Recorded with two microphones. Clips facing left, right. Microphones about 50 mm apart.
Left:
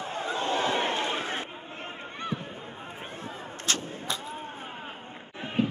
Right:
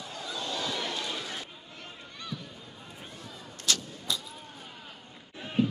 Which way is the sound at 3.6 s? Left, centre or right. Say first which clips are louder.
Left 1 dB; left.